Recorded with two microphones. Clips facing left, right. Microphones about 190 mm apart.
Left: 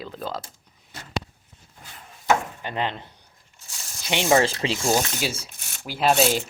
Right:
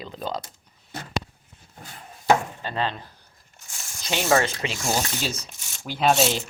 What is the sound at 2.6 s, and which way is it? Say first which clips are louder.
Speech: even; 20° left (ahead or behind).